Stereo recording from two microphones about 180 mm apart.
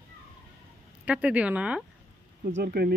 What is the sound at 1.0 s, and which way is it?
Speech, 5° right (ahead or behind).